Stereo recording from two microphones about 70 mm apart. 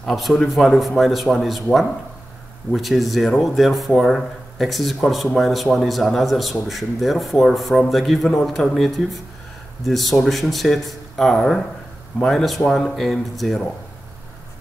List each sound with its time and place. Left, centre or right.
0.0 s speech: centre